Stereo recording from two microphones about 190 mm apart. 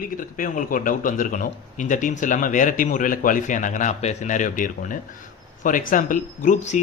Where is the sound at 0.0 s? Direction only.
45° left (ahead or behind).